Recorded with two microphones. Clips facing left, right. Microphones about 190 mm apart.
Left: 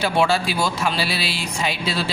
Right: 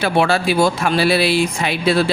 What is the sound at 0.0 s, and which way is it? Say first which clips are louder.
A man's voice: right 3 dB; 60° right (ahead or behind).